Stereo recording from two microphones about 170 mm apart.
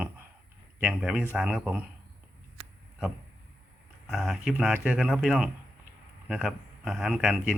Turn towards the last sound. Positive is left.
turn(degrees=-5)  # may be behind; listen again after turning